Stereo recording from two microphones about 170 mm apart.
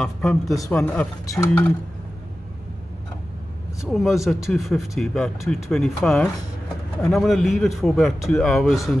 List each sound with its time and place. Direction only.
0.7 s speech: 10° left (ahead or behind)
3.8 s a man's voice: centre (ahead or behind)